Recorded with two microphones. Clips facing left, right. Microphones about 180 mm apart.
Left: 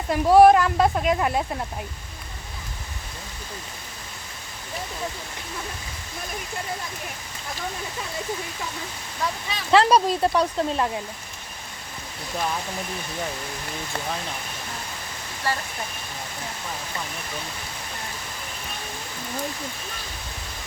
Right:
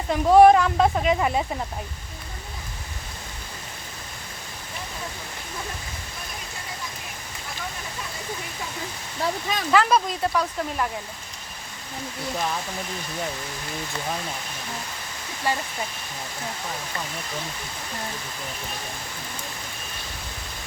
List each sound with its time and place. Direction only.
0.1 s speech: 5° left (ahead or behind)
9.2 s speech: 30° right (ahead or behind)
9.7 s speech: 30° left (ahead or behind)
15.5 s speech: 15° right (ahead or behind)